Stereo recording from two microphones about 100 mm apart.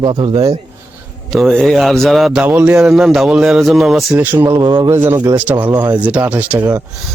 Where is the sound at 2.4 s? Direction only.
15° right (ahead or behind).